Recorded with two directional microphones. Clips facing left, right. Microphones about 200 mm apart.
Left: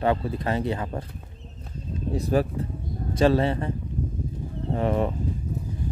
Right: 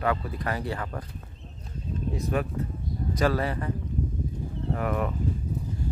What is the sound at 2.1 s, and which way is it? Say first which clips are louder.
Speech: left 6 dB; 35° left (ahead or behind).